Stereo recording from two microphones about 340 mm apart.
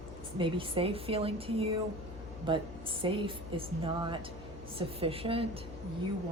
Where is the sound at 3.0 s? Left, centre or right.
Centre.